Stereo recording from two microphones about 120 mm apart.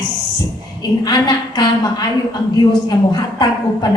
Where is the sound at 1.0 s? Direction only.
35° left (ahead or behind).